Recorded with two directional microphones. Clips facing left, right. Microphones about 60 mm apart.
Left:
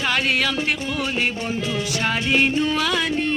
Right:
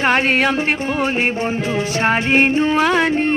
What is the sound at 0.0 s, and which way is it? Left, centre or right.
Music, right.